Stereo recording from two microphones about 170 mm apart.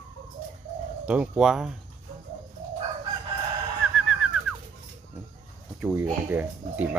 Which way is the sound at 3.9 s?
5° right (ahead or behind).